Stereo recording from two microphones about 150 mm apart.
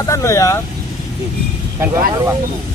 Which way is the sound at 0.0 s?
20° left (ahead or behind).